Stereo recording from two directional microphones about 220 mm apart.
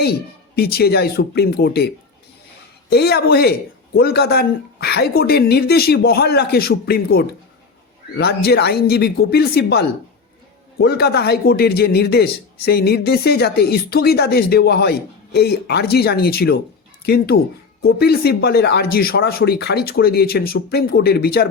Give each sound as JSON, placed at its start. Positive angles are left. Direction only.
{"t": 0.5, "sound": "a man's voice", "side_deg": 45}
{"t": 2.9, "sound": "a man's voice", "side_deg": 45}